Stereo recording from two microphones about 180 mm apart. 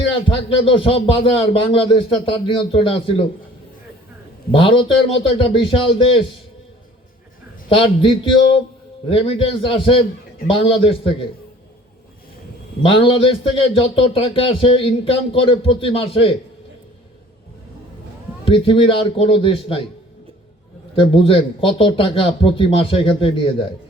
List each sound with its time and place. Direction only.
0.1 s a man's voice: 30° left (ahead or behind)
4.5 s a man's voice: 30° left (ahead or behind)
7.7 s a man's voice: 30° left (ahead or behind)
12.8 s a man's voice: 30° left (ahead or behind)
18.4 s a man's voice: 30° left (ahead or behind)
20.9 s a man's voice: 30° left (ahead or behind)